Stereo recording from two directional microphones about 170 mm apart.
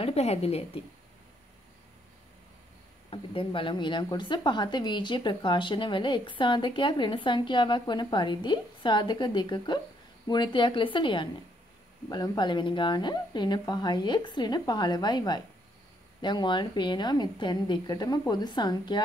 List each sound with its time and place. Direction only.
0.0 s a woman's voice: 35° left (ahead or behind)
3.1 s speech: 30° left (ahead or behind)